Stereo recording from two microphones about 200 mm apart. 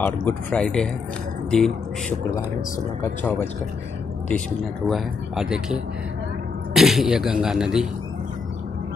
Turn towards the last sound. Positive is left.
turn(degrees=-5)  # may be behind; listen again after turning